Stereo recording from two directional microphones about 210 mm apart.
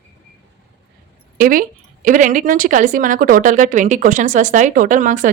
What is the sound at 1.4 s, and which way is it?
Speech, 40° right (ahead or behind).